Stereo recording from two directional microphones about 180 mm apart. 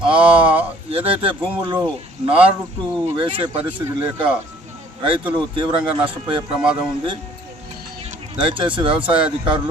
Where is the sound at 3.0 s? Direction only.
30° right (ahead or behind).